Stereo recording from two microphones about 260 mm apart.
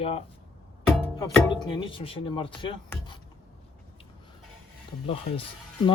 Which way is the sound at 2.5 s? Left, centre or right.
Centre.